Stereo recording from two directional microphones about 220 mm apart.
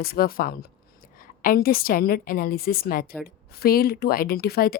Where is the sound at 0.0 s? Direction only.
40° left (ahead or behind).